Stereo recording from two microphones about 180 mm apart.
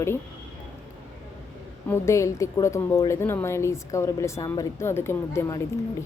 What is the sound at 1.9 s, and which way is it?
Speech, 15° left (ahead or behind).